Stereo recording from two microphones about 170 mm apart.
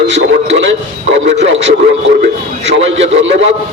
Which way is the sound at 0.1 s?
90° right.